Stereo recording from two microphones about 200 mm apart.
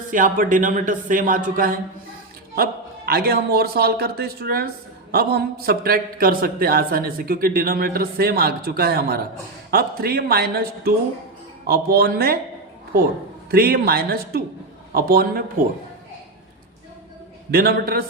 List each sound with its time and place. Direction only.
0.1 s speech: 40° right (ahead or behind)
3.1 s a man's voice: 50° right (ahead or behind)
13.5 s a man's voice: 50° right (ahead or behind)
17.5 s a man's voice: 50° right (ahead or behind)